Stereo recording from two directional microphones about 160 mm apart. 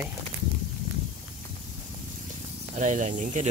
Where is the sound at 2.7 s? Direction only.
50° right (ahead or behind).